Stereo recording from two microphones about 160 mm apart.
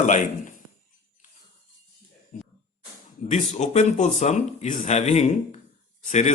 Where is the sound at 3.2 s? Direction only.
50° left (ahead or behind).